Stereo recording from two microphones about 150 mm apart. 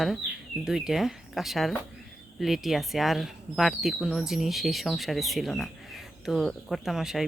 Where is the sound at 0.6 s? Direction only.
5° right (ahead or behind).